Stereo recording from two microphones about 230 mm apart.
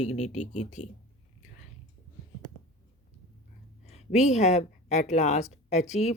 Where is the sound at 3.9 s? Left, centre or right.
Left.